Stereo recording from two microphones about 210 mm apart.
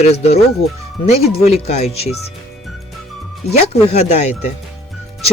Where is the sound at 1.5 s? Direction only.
30° left (ahead or behind).